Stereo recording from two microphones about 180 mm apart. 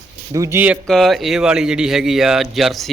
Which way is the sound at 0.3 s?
15° right (ahead or behind).